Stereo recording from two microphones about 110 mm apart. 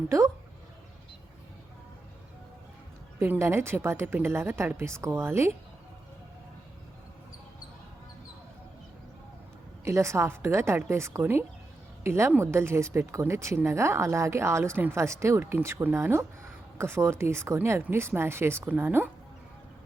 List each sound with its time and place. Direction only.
3.2 s speech: 25° right (ahead or behind)
9.8 s speech: 25° right (ahead or behind)